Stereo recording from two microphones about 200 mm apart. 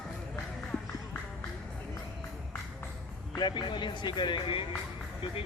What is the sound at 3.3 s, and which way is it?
Speech, 20° left (ahead or behind).